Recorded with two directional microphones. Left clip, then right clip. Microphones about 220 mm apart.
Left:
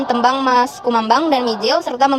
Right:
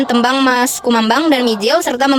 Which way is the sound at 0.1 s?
55° right (ahead or behind).